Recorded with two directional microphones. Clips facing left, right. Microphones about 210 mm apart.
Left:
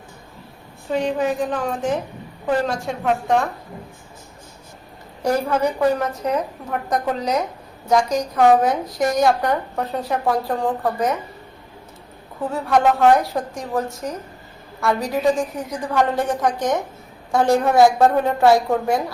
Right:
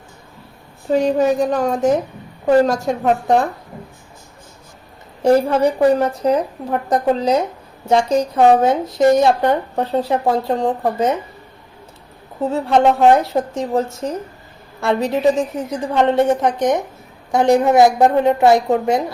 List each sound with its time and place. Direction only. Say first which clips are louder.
0.9 s a woman's voice: right 6 dB; 40° right (ahead or behind)
5.2 s a woman's voice: right 6 dB; 30° right (ahead or behind)
12.4 s a woman's voice: right 4 dB; 25° right (ahead or behind)